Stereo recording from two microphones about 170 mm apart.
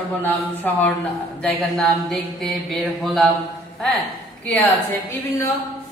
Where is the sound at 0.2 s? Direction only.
10° left (ahead or behind).